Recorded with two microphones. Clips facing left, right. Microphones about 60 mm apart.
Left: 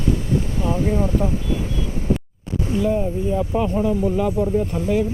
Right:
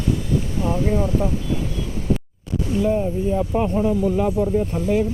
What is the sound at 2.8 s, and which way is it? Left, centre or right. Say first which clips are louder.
Speech: right 1 dB; centre.